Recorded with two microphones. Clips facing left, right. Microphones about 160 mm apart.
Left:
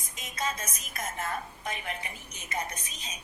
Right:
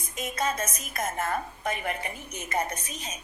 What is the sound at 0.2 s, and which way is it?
A woman's voice, 55° right (ahead or behind).